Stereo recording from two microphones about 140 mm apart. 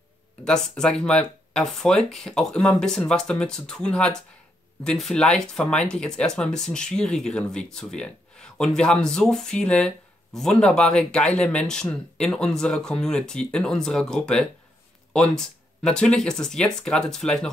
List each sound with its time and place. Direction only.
0.5 s speech: 5° left (ahead or behind)